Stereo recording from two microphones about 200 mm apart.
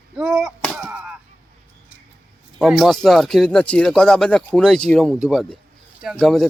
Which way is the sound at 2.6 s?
Centre (ahead or behind).